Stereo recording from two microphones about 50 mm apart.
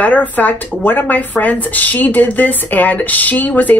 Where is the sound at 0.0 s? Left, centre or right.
Left.